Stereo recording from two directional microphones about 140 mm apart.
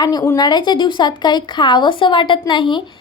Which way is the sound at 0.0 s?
25° left (ahead or behind).